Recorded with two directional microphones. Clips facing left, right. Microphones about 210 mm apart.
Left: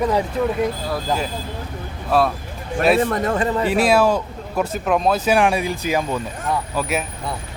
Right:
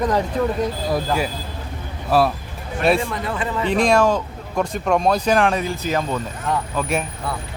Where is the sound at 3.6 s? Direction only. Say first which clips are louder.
Right 1 dB; 5° left (ahead or behind).